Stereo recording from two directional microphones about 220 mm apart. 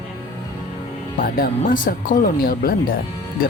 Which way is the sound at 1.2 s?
40° left (ahead or behind).